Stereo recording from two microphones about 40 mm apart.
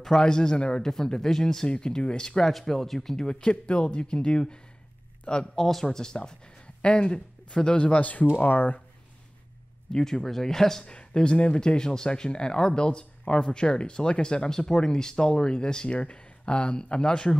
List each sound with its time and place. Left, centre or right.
0.0 s a man's voice: centre
3.3 s speech: left
5.7 s a man's voice: centre; by 8.3 s left
8.4 s speech: left
9.9 s a man's voice: centre
10.9 s speech: left